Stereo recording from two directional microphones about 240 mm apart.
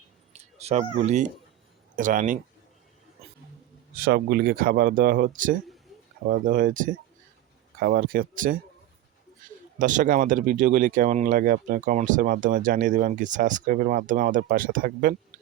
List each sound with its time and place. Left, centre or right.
0.6 s speech: right
3.9 s speech: right
9.7 s speech: right